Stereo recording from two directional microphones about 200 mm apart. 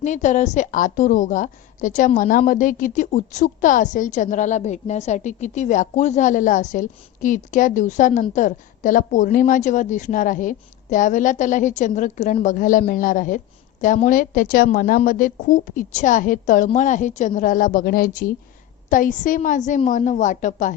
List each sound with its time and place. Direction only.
0.0 s a woman's voice: 35° left (ahead or behind)